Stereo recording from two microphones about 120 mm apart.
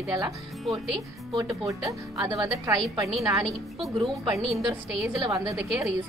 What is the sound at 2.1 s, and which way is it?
Speech, 30° right (ahead or behind).